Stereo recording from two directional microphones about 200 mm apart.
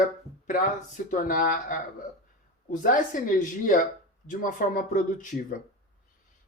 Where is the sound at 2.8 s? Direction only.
40° left (ahead or behind).